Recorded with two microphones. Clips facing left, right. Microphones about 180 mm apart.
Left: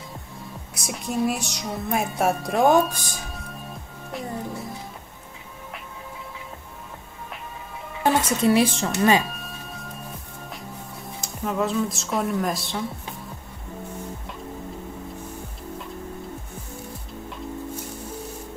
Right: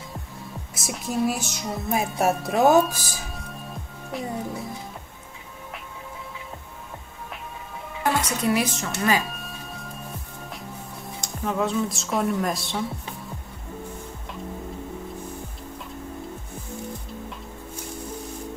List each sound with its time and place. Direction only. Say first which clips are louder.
0.7 s speech: even; centre (ahead or behind)
8.0 s speech: left 4 dB; 25° left (ahead or behind)
9.2 s music: left 1 dB; centre (ahead or behind)
11.1 s a woman's voice: even; centre (ahead or behind)